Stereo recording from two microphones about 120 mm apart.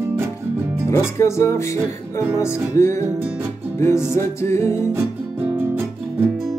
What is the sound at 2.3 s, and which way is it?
Music, 25° left (ahead or behind).